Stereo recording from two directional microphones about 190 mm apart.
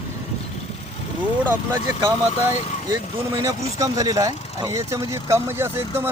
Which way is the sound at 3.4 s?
20° right (ahead or behind).